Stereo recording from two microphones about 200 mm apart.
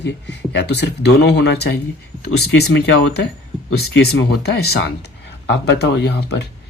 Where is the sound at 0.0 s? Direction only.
60° left (ahead or behind).